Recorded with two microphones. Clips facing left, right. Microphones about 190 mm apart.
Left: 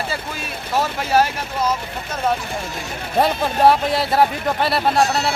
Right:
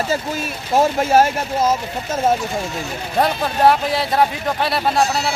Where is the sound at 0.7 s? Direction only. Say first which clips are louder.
Right 5 dB; 45° right (ahead or behind).